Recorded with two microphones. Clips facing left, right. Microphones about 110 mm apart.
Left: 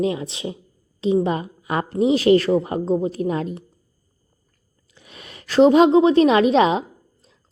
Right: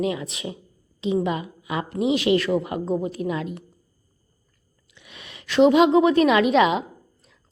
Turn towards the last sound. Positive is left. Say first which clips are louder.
# left 2 dB
turn(degrees=35)  # may be behind; listen again after turning